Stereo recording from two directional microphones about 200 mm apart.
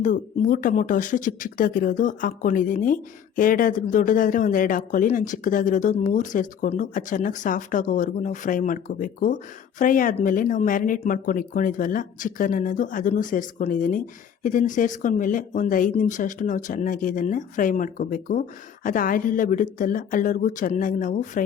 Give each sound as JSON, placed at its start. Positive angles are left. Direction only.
{"t": 0.0, "sound": "speech", "side_deg": 40}